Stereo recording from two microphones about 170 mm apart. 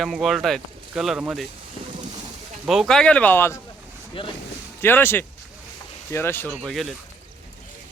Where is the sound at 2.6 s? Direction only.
Centre (ahead or behind).